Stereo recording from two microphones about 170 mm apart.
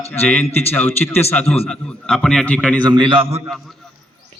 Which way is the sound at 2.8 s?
30° right (ahead or behind).